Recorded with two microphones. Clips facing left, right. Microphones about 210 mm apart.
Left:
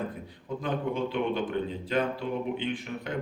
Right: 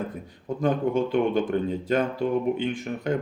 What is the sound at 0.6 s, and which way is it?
Speech, 45° right (ahead or behind).